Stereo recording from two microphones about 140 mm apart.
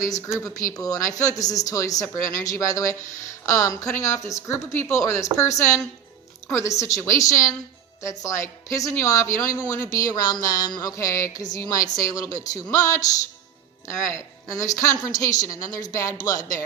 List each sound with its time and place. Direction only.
0.0 s speech: 20° left (ahead or behind)